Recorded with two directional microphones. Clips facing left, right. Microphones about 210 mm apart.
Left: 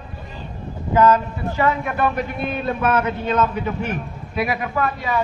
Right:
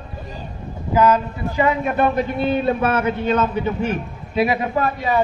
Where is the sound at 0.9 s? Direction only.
10° right (ahead or behind); by 5.2 s 30° right (ahead or behind).